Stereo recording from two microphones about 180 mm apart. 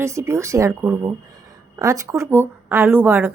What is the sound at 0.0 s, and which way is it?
A woman's voice, 15° right (ahead or behind).